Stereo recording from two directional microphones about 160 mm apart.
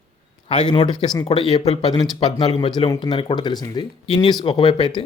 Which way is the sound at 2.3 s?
30° left (ahead or behind).